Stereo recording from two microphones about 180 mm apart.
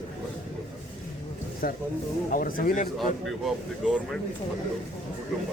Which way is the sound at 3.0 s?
Centre (ahead or behind).